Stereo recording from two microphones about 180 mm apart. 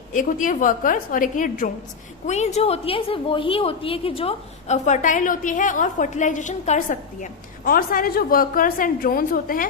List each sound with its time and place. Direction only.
0.1 s a woman's voice: 45° left (ahead or behind)